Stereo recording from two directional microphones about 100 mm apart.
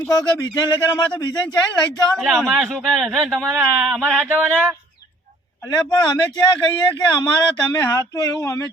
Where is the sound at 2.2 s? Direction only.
Centre (ahead or behind).